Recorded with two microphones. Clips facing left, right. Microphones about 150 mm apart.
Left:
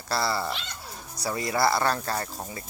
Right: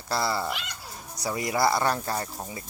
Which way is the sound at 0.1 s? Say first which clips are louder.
Even; 15° right (ahead or behind).